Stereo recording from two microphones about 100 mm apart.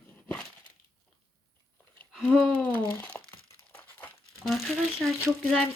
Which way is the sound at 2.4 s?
15° left (ahead or behind).